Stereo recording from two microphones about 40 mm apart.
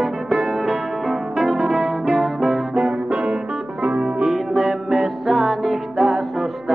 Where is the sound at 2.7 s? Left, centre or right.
Right.